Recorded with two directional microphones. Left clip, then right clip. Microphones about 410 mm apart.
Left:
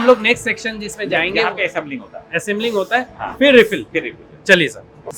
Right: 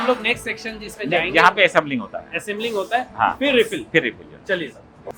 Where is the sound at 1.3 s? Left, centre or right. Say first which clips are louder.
Right 4 dB; right.